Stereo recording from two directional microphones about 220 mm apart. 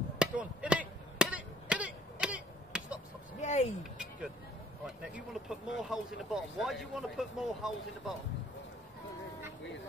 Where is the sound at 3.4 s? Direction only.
30° left (ahead or behind).